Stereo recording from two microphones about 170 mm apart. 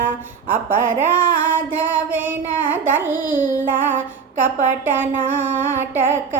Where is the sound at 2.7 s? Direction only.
10° right (ahead or behind).